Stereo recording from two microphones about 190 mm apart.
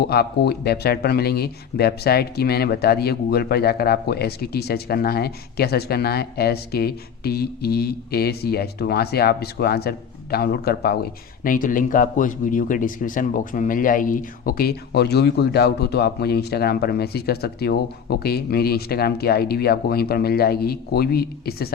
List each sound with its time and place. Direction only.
0.0 s speech: 55° left (ahead or behind)